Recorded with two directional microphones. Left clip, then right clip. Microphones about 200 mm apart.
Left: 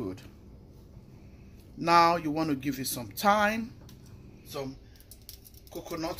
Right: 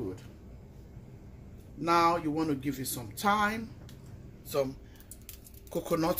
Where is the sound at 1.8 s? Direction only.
50° left (ahead or behind).